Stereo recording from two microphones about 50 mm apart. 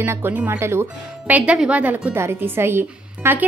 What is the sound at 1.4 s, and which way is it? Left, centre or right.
Speech, right.